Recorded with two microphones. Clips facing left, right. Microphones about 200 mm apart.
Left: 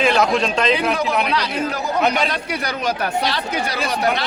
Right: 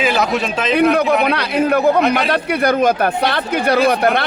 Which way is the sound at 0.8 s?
60° right (ahead or behind).